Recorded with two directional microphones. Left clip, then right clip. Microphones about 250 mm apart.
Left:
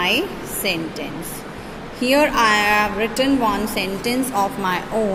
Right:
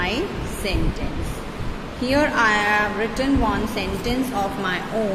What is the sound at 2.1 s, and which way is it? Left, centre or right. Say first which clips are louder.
Speech: left 3 dB; left.